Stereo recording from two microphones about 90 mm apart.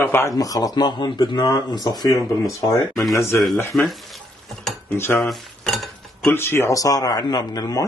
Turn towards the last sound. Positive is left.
turn(degrees=45)  # may be behind; listen again after turning